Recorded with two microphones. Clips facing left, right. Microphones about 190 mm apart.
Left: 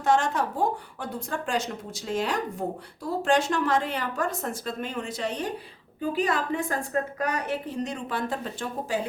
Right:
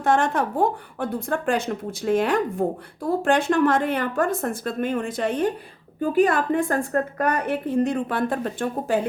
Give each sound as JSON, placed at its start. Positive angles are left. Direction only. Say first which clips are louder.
{"t": 0.0, "sound": "speech", "louder": "right 3 dB", "side_deg": -55}